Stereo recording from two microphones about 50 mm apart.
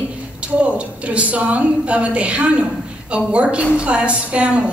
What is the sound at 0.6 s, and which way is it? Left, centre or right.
A woman's voice, right.